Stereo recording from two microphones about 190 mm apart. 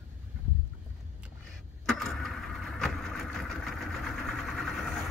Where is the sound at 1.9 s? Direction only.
Centre (ahead or behind).